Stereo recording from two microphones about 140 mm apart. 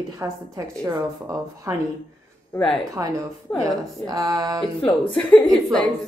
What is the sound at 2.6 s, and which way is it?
Speech, 5° left (ahead or behind).